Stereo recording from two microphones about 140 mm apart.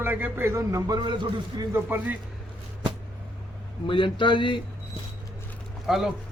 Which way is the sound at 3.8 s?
35° left (ahead or behind).